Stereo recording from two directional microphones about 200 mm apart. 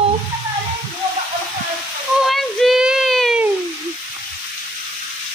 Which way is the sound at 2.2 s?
Centre (ahead or behind).